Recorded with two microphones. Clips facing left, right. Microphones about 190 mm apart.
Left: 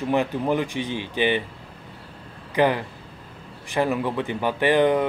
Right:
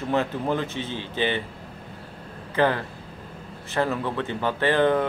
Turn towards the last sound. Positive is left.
turn(degrees=15)  # may be behind; listen again after turning